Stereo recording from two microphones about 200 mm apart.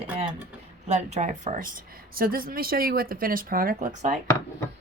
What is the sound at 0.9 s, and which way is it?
Speech, 35° right (ahead or behind).